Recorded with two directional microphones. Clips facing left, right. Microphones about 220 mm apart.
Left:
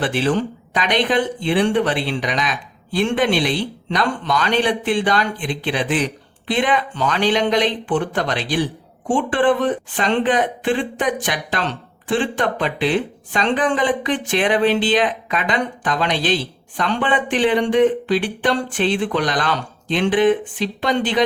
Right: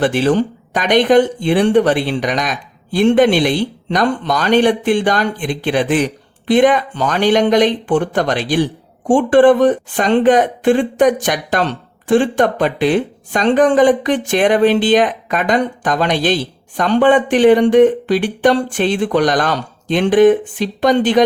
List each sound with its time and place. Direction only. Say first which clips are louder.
0.0 s speech: right 5 dB; 45° right (ahead or behind)